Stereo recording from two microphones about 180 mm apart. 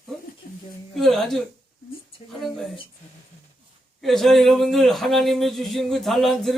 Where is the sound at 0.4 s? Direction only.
50° left (ahead or behind).